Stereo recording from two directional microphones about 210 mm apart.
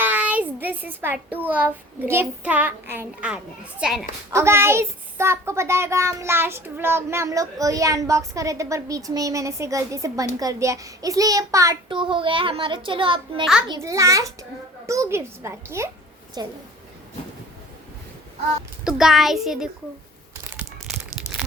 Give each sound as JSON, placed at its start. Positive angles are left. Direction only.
{"t": 0.0, "sound": "a child's voice", "side_deg": -5}
{"t": 18.9, "sound": "a child's voice", "side_deg": 0}
{"t": 20.5, "sound": "a sound", "side_deg": -5}